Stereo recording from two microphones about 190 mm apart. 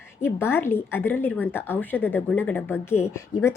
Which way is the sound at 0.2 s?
10° left (ahead or behind).